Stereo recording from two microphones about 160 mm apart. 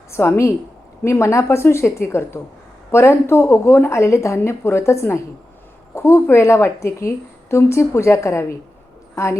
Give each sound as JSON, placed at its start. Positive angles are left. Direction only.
{"t": 0.1, "sound": "a woman's voice", "side_deg": 15}